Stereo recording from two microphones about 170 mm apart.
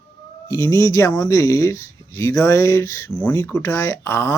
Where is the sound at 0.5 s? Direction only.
15° left (ahead or behind).